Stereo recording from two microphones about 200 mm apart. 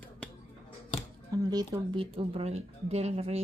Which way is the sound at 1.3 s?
20° right (ahead or behind).